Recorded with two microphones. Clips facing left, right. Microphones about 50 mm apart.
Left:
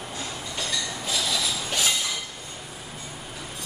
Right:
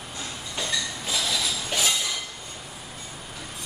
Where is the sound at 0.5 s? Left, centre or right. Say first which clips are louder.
Right 2 dB; centre.